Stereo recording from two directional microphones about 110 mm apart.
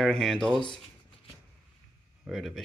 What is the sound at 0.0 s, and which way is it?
Speech, 5° left (ahead or behind).